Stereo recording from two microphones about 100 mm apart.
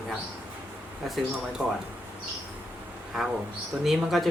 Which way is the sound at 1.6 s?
Centre (ahead or behind).